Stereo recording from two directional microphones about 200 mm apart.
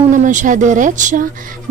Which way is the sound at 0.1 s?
40° right (ahead or behind).